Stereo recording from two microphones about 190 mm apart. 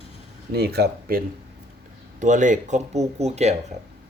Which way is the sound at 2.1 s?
40° right (ahead or behind).